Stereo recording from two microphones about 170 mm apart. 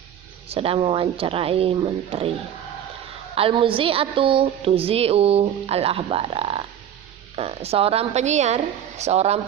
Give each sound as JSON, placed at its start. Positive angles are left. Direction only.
{"t": 0.4, "sound": "a woman's voice", "side_deg": -35}
{"t": 3.3, "sound": "a woman's voice", "side_deg": -30}